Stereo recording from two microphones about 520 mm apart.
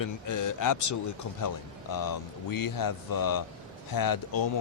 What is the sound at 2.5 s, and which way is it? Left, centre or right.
Speech, left.